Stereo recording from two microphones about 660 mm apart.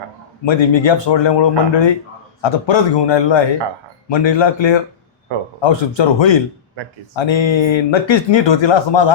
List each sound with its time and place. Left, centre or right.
0.4 s speech: left